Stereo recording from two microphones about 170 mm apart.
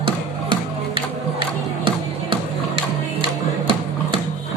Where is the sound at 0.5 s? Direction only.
30° right (ahead or behind).